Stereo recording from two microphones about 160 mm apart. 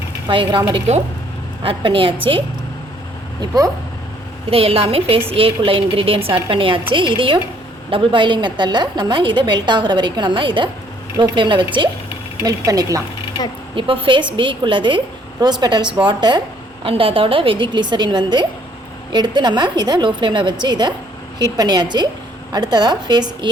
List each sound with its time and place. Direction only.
0.3 s a woman's voice: 30° right (ahead or behind)
0.7 s a woman's voice: 45° right (ahead or behind)
3.4 s a woman's voice: 25° right (ahead or behind)
4.5 s a woman's voice: 35° right (ahead or behind)
12.0 s speech: 20° right (ahead or behind)
13.7 s a woman's voice: 30° right (ahead or behind)